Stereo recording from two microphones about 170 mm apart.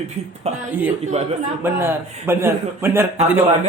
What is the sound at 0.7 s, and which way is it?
A man's voice, 10° right (ahead or behind).